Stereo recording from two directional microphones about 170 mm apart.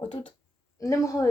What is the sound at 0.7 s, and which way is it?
Speech, 20° left (ahead or behind).